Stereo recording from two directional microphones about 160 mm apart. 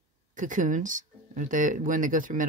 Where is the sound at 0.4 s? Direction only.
55° right (ahead or behind).